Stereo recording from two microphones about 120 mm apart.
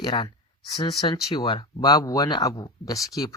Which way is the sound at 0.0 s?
40° left (ahead or behind).